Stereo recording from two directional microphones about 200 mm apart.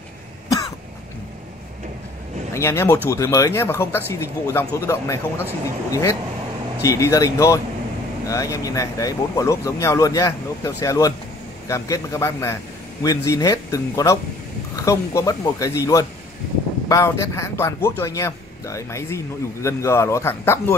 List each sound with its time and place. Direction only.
2.5 s a man's voice: 15° left (ahead or behind)